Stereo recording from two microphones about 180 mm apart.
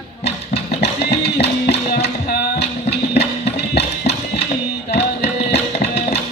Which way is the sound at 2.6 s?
65° left (ahead or behind).